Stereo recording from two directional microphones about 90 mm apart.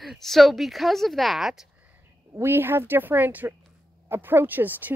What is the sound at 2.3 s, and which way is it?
A woman's voice, 25° right (ahead or behind).